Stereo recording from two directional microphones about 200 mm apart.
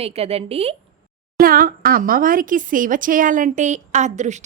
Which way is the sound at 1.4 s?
45° right (ahead or behind).